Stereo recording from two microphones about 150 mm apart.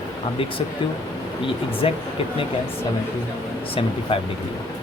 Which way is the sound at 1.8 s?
40° left (ahead or behind).